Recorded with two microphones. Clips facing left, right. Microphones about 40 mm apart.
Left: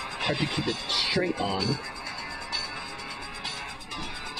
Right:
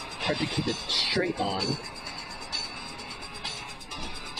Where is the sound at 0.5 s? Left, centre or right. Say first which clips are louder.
Left 1 dB; left.